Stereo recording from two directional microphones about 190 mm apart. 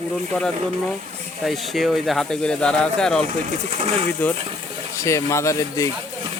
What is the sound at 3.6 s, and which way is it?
Speech, 35° right (ahead or behind).